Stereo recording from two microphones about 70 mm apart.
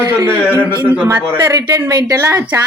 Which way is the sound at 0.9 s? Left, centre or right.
Right.